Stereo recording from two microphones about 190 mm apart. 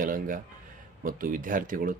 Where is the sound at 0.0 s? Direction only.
45° right (ahead or behind).